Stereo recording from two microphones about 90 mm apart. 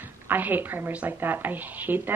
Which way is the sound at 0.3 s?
20° right (ahead or behind).